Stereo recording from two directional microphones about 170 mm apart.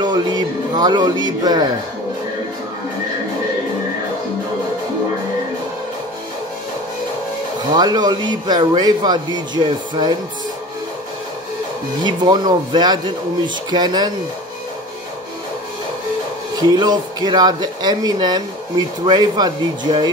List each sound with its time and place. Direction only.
0.0 s a man's voice: 25° right (ahead or behind)
7.7 s a man's voice: 25° right (ahead or behind)
12.0 s a man's voice: 25° right (ahead or behind)
16.5 s a man's voice: 25° right (ahead or behind)